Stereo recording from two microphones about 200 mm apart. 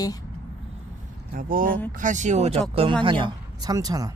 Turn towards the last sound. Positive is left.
turn(degrees=-20)  # may be behind; listen again after turning